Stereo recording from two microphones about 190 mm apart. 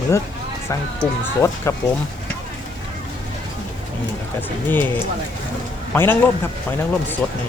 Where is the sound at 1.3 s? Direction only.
15° left (ahead or behind).